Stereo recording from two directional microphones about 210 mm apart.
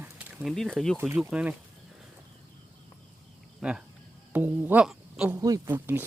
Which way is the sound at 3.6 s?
5° right (ahead or behind).